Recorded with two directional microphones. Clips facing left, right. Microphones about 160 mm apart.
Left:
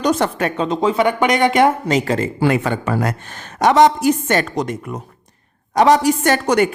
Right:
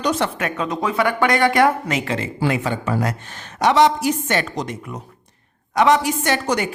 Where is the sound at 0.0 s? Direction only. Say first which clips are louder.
Left 4 dB; 40° left (ahead or behind); by 2.0 s 20° left (ahead or behind).